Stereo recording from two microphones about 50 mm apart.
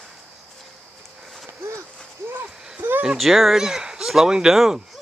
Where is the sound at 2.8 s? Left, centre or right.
Right.